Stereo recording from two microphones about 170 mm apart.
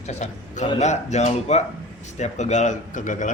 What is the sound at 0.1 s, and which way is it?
A man's voice, 45° left (ahead or behind).